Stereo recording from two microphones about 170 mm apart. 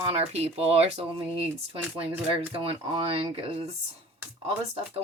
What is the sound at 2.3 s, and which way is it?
Speech, 30° right (ahead or behind).